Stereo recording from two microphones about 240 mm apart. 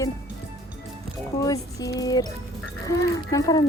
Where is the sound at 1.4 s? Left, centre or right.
Centre.